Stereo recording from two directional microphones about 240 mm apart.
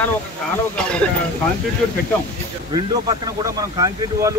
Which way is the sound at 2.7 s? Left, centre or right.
Centre.